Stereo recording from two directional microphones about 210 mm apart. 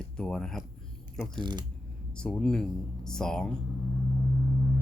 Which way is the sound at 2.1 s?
5° left (ahead or behind).